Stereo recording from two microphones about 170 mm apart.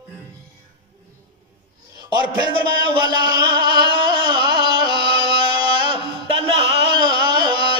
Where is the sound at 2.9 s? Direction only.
25° right (ahead or behind).